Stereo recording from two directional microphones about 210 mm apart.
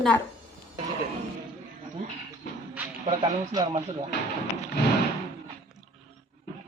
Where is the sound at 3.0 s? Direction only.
20° right (ahead or behind).